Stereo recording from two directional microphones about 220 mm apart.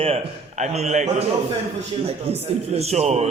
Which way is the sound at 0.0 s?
25° right (ahead or behind).